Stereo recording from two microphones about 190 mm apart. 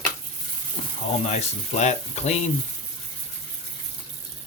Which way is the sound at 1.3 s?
35° left (ahead or behind).